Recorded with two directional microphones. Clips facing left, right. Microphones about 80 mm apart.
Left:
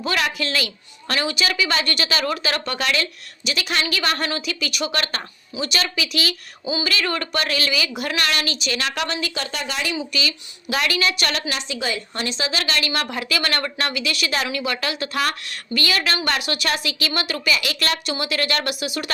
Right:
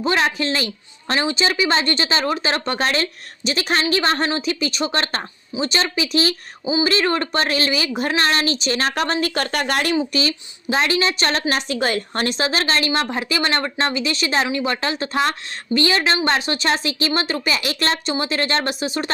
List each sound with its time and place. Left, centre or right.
0.0 s a woman's voice: right